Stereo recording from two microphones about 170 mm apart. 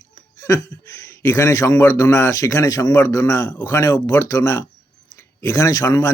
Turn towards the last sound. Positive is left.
turn(degrees=15)  # may be behind; listen again after turning